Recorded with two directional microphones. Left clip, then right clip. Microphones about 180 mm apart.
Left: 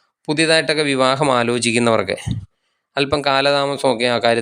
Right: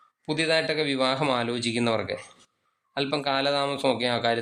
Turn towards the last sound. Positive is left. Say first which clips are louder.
# left 8 dB
turn(degrees=35)  # may be behind; listen again after turning